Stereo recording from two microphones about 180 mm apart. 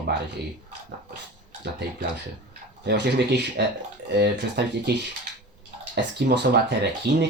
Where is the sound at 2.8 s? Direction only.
70° right (ahead or behind).